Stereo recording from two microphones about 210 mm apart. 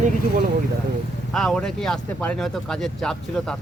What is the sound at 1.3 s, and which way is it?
Speech, centre (ahead or behind).